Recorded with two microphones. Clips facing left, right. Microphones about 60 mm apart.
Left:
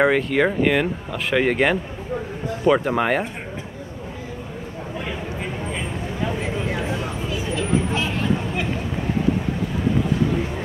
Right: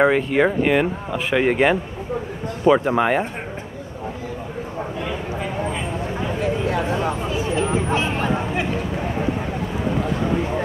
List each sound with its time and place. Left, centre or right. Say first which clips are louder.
0.0 s speech: right 1 dB; centre
7.5 s vehicle: right 1 dB; right